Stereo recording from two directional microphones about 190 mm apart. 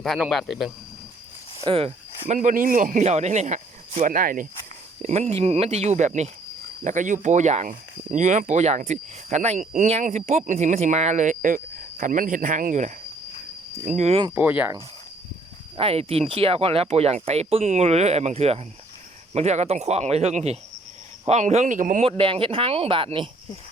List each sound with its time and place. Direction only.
0.0 s speech: centre (ahead or behind)
1.6 s speech: 30° right (ahead or behind)
2.2 s speech: 40° right (ahead or behind)
5.0 s speech: 35° right (ahead or behind)
14.3 s speech: 10° right (ahead or behind)
15.8 s speech: 30° right (ahead or behind)
22.0 s speech: 30° right (ahead or behind)